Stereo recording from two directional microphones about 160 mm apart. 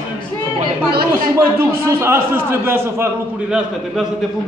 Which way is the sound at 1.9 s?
15° right (ahead or behind).